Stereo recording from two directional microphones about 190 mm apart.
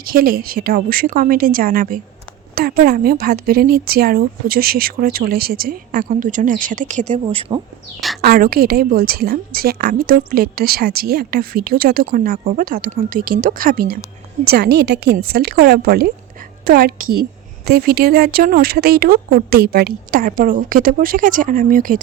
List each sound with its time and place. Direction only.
0.0 s a woman's voice: 50° right (ahead or behind); by 7.6 s 35° right (ahead or behind)
8.2 s a woman's voice: 50° right (ahead or behind)